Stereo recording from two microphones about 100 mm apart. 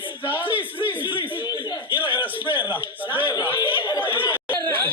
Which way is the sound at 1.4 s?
40° left (ahead or behind).